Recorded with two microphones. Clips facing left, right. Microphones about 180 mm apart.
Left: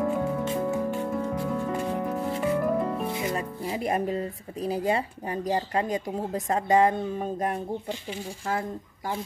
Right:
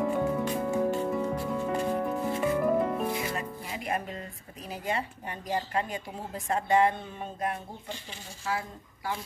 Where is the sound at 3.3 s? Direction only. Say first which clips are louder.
Left 5 dB; 35° left (ahead or behind).